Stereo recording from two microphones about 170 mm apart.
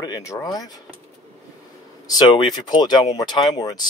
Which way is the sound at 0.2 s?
20° left (ahead or behind).